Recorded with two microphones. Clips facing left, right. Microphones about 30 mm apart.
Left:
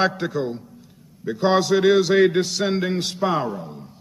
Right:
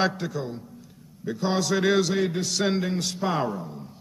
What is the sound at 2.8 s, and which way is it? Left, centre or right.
Speech, left.